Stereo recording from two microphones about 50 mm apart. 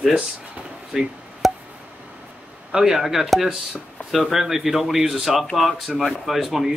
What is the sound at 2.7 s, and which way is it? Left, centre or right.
Speech, centre.